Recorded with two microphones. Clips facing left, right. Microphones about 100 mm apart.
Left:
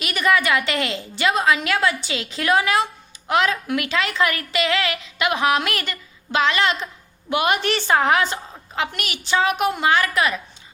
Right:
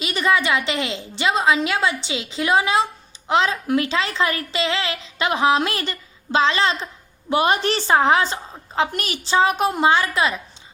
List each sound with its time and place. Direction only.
0.0 s a woman's voice: 25° right (ahead or behind)